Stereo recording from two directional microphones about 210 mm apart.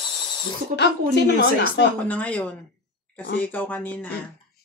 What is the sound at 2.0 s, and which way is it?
Speech, 5° left (ahead or behind).